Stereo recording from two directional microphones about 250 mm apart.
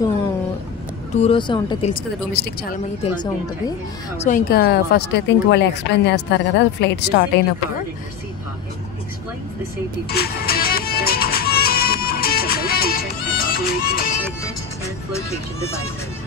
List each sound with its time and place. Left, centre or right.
1.1 s speech: left
2.3 s a woman's voice: left
3.0 s a woman's voice: centre
4.2 s speech: left
10.0 s music: left